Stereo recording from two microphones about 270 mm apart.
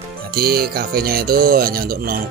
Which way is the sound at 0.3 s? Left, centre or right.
Right.